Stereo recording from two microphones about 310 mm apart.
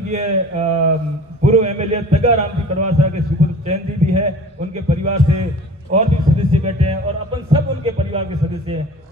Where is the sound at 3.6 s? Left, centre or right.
Right.